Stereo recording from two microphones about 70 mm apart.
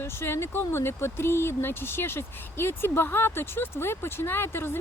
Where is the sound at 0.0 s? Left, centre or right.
Left.